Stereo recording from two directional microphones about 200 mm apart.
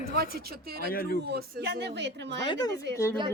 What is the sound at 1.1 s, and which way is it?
Speech, 55° right (ahead or behind).